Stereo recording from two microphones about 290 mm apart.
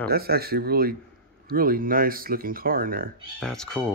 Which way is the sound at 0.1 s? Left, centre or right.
Right.